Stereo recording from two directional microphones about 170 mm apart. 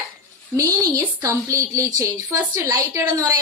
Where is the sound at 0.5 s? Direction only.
20° right (ahead or behind).